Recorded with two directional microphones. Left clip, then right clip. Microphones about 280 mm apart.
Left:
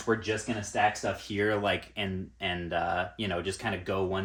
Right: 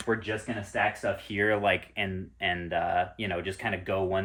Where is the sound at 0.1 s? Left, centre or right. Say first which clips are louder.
Left 1 dB; centre.